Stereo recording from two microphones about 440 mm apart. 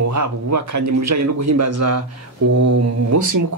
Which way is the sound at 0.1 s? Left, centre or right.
Right.